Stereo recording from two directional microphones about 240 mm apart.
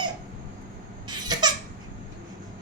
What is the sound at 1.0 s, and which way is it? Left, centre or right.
Baby laughter, centre.